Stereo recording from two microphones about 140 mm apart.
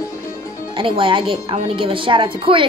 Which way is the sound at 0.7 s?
40° right (ahead or behind).